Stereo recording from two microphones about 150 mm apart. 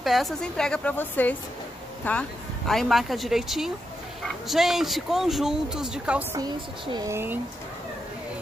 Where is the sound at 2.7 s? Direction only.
Centre (ahead or behind).